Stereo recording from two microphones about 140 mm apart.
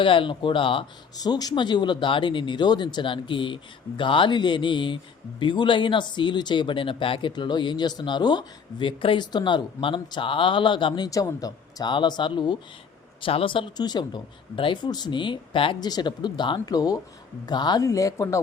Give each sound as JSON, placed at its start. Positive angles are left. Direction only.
{"t": 0.0, "sound": "speech", "side_deg": 35}